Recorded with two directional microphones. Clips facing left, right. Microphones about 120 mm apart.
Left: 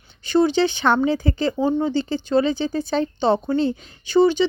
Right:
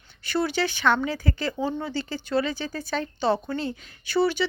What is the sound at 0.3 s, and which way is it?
Speech, 25° left (ahead or behind).